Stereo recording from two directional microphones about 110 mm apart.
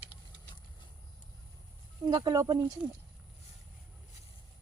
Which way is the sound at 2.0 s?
40° right (ahead or behind).